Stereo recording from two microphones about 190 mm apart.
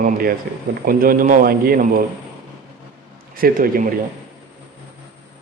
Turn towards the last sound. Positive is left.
turn(degrees=-50)  # may be behind; listen again after turning